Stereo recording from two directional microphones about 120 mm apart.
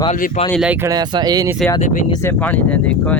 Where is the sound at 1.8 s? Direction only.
90° left.